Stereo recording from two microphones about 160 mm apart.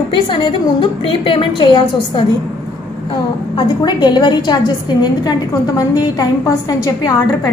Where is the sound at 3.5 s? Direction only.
25° left (ahead or behind).